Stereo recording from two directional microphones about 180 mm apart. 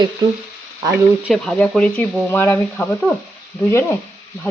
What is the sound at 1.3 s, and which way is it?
Speech, 5° left (ahead or behind).